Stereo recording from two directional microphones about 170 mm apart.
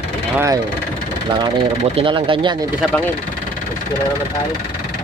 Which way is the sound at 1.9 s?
30° right (ahead or behind).